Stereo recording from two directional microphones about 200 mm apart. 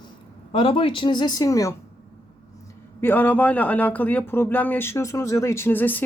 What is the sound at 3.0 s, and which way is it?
Speech, 10° left (ahead or behind).